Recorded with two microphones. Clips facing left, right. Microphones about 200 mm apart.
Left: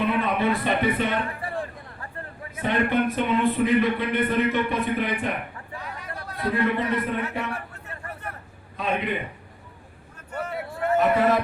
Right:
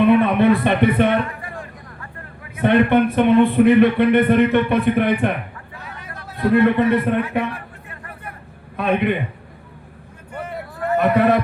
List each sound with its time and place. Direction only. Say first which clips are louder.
0.0 s a sound: right 9 dB; 60° right (ahead or behind)
1.3 s a sound: left 2 dB; 30° left (ahead or behind)
2.6 s a man's voice: right 8 dB; 60° right (ahead or behind)
6.5 s a man's voice: right 9 dB; 65° right (ahead or behind)
8.7 s a man's voice: right 8 dB; 60° right (ahead or behind)
10.9 s speech: right 4 dB; 60° right (ahead or behind)